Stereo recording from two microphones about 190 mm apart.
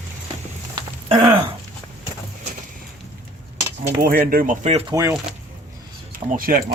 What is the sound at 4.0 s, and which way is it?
Speech, 50° right (ahead or behind).